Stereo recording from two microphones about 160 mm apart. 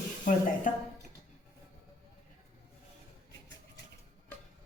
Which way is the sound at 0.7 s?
55° left (ahead or behind).